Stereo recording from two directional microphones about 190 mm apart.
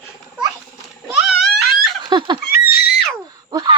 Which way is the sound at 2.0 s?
20° right (ahead or behind).